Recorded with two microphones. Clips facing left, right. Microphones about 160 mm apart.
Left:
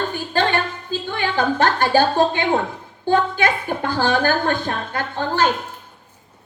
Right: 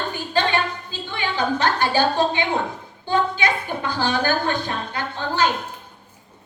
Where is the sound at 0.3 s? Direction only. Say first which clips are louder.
Left 1 dB; 50° left (ahead or behind).